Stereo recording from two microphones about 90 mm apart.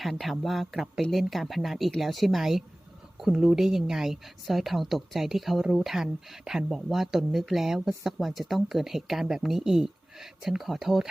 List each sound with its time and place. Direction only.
0.0 s a woman's voice: centre (ahead or behind)